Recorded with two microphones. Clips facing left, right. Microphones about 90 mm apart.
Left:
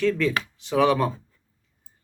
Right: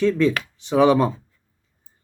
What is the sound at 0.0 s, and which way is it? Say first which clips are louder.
Speech: right 4 dB; 20° right (ahead or behind).